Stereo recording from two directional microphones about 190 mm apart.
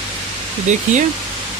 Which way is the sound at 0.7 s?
40° right (ahead or behind).